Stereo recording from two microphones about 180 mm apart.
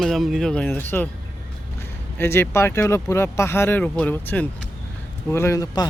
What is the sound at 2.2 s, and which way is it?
Speech, 15° left (ahead or behind).